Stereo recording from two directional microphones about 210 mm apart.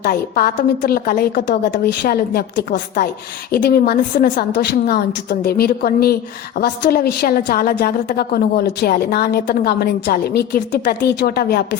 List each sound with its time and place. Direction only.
0.0 s a woman's voice: 45° left (ahead or behind)